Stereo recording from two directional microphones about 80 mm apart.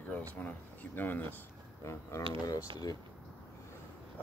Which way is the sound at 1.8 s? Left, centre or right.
Left.